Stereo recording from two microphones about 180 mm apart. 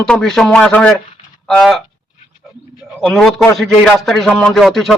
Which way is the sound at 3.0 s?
Centre (ahead or behind).